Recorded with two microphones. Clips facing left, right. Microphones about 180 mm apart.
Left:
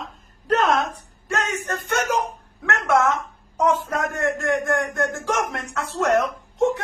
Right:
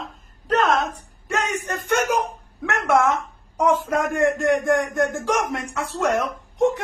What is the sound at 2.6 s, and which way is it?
A man's voice, 15° right (ahead or behind).